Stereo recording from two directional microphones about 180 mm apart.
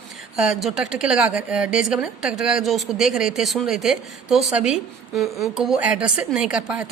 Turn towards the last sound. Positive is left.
turn(degrees=-5)  # may be behind; listen again after turning